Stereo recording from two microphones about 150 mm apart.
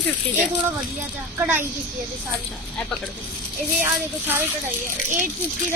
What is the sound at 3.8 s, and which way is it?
Speech, 15° right (ahead or behind).